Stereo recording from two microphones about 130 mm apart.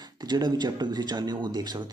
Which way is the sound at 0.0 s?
30° right (ahead or behind).